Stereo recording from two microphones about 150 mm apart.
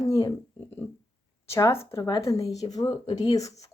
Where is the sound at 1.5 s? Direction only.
20° left (ahead or behind).